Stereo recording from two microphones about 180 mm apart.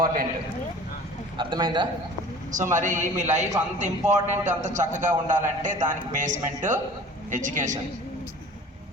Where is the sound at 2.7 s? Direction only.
45° right (ahead or behind).